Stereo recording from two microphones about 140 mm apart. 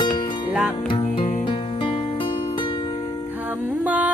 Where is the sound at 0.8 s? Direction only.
40° left (ahead or behind).